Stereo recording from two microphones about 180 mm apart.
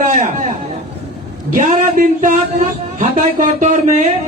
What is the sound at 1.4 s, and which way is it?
Speech, 45° right (ahead or behind).